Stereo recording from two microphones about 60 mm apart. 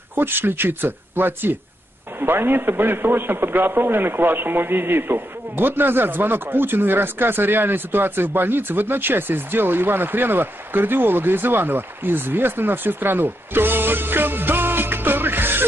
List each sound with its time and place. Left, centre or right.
0.1 s a man's voice: right